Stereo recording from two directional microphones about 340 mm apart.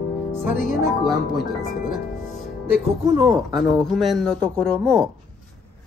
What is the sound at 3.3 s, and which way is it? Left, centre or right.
A man's voice, centre.